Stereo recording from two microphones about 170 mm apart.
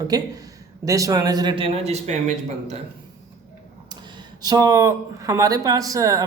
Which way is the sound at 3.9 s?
25° right (ahead or behind).